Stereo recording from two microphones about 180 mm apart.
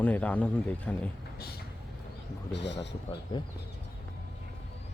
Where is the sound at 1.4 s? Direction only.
60° left (ahead or behind).